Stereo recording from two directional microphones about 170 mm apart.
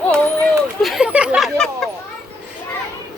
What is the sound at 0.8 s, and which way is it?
Speech, centre (ahead or behind).